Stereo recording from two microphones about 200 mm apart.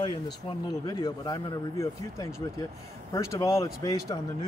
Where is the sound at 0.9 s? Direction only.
20° left (ahead or behind).